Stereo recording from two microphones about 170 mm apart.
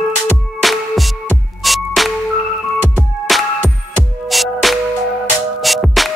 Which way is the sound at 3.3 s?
Centre (ahead or behind).